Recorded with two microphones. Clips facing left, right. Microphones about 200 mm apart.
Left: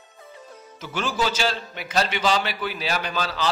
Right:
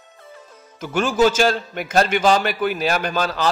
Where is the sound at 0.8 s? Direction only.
50° right (ahead or behind).